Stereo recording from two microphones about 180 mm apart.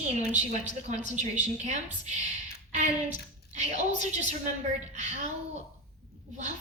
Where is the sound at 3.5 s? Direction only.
40° right (ahead or behind).